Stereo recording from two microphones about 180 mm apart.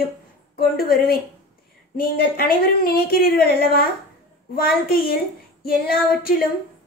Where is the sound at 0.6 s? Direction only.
55° left (ahead or behind).